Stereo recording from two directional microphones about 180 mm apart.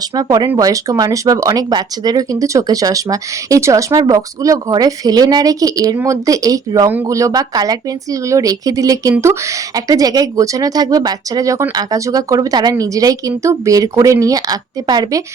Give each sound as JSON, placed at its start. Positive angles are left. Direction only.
{"t": 0.2, "sound": "speech", "side_deg": -20}